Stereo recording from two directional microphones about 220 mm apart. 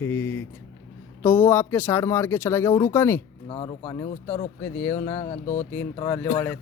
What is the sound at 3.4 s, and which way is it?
Speech, 25° left (ahead or behind).